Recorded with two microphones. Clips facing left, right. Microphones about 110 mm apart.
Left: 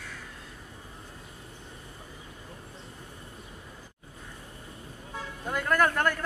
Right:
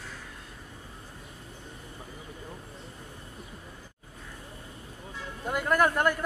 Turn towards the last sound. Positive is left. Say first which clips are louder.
# right 1 dB
turn(degrees=-15)  # may be behind; listen again after turning